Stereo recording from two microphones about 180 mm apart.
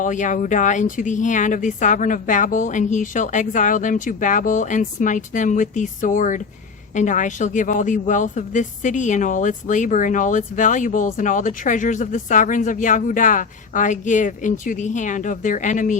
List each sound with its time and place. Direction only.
0.0 s speech: 45° left (ahead or behind)